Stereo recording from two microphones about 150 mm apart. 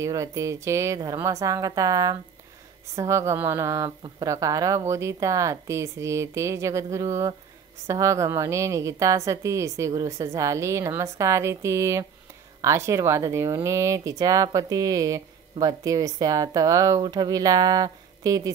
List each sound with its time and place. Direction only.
0.0 s a woman's voice: 20° right (ahead or behind)